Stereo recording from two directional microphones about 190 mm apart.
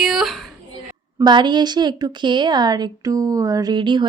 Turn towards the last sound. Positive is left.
turn(degrees=-25)  # may be behind; listen again after turning